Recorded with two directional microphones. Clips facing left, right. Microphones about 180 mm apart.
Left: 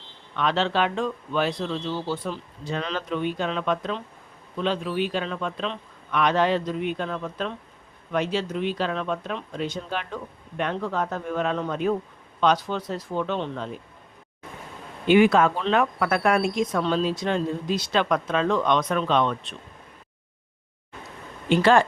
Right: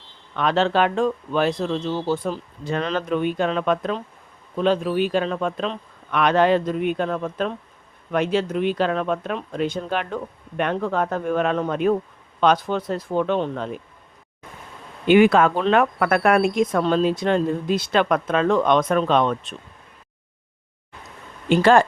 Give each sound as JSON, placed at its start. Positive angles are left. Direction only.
{"t": 0.3, "sound": "speech", "side_deg": -50}
{"t": 6.1, "sound": "speech", "side_deg": -60}
{"t": 15.0, "sound": "speech", "side_deg": -60}
{"t": 21.5, "sound": "speech", "side_deg": -45}